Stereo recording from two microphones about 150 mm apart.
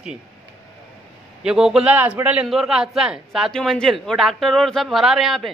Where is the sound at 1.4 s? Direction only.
5° right (ahead or behind).